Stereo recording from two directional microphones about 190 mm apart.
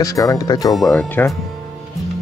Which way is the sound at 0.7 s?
Centre (ahead or behind).